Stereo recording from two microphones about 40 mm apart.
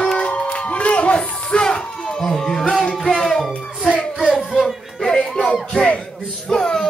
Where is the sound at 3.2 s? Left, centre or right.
Centre.